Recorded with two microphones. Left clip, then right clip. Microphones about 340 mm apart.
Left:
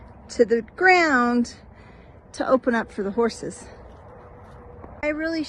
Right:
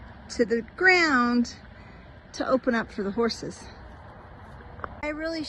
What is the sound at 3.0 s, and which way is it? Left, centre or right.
Speech, left.